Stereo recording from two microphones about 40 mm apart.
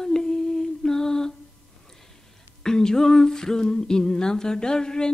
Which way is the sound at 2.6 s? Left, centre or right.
Centre.